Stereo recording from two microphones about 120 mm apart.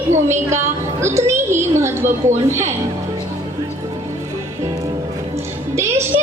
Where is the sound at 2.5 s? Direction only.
20° right (ahead or behind).